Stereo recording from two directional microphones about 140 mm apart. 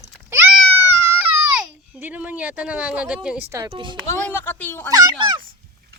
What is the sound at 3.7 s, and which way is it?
Speech, 35° right (ahead or behind).